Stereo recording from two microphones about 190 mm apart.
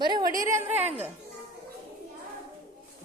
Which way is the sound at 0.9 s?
10° right (ahead or behind).